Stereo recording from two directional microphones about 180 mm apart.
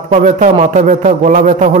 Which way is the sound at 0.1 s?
40° right (ahead or behind).